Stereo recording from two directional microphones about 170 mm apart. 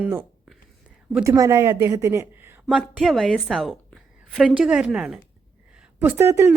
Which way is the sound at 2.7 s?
Centre (ahead or behind).